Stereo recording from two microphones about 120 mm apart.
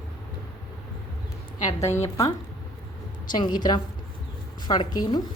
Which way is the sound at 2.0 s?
30° left (ahead or behind).